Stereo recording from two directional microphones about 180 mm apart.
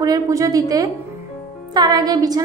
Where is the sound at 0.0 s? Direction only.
20° right (ahead or behind).